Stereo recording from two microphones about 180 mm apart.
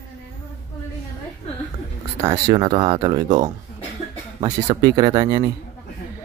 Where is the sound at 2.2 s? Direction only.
25° right (ahead or behind).